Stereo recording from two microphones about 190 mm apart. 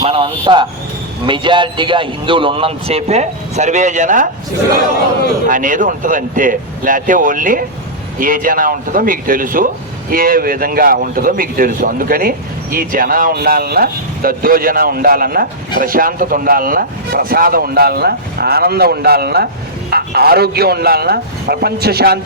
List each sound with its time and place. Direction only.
0.0 s vehicle: 30° right (ahead or behind)
1.3 s a man's voice: 25° right (ahead or behind); by 4.3 s 40° right (ahead or behind)
5.5 s speech: 45° right (ahead or behind)